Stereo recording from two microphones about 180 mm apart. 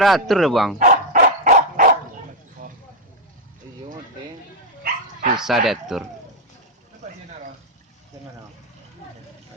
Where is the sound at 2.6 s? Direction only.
50° right (ahead or behind).